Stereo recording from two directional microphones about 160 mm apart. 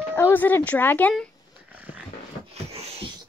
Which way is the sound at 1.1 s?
5° right (ahead or behind).